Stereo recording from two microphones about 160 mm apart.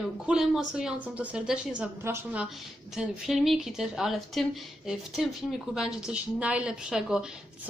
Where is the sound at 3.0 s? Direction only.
Centre (ahead or behind).